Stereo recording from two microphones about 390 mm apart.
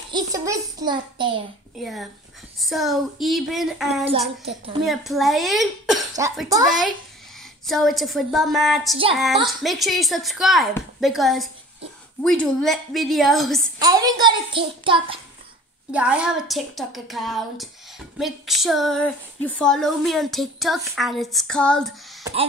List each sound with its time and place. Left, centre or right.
0.1 s a child's voice: centre
1.8 s speech: centre
13.8 s a child's voice: centre
22.2 s wail: centre